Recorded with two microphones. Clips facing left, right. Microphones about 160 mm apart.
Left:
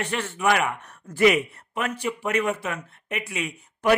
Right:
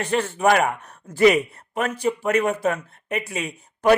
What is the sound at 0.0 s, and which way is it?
Speech, 35° right (ahead or behind).